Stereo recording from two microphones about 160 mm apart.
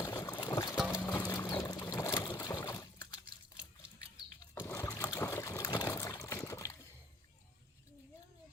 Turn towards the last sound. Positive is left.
turn(degrees=20)  # may be behind; listen again after turning